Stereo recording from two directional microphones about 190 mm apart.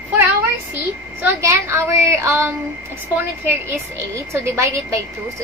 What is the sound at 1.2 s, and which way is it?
A woman's voice, 15° right (ahead or behind).